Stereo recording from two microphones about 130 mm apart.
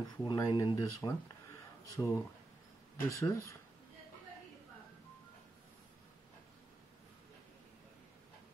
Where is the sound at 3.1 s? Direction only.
25° left (ahead or behind).